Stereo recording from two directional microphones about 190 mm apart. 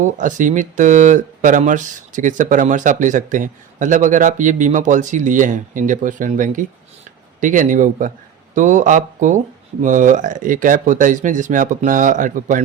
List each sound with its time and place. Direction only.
0.0 s speech: 40° right (ahead or behind)